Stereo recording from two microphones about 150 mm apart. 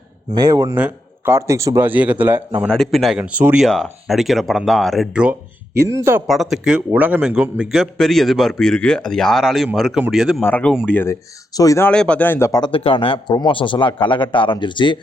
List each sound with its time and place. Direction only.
0.3 s speech: 25° right (ahead or behind)
0.7 s speech: 10° right (ahead or behind)
2.6 s a man's voice: centre (ahead or behind)
3.7 s a man's voice: 5° left (ahead or behind); by 6.2 s 15° right (ahead or behind)
6.2 s a man's voice: centre (ahead or behind)
10.4 s speech: 10° left (ahead or behind)
10.7 s a man's voice: centre (ahead or behind)
10.9 s speech: 15° left (ahead or behind)
11.9 s speech: 5° left (ahead or behind); by 14.9 s 30° left (ahead or behind)